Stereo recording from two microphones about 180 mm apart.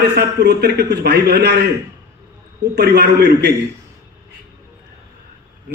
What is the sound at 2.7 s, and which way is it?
Speech, 65° right (ahead or behind).